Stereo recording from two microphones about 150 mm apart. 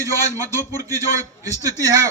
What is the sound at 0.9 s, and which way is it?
A man's voice, 20° right (ahead or behind).